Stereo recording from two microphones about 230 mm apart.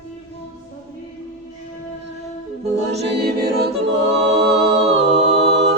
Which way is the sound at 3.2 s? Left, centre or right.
Right.